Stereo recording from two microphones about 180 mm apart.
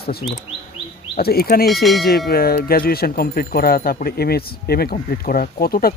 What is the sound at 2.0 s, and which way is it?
Speech, 60° left (ahead or behind).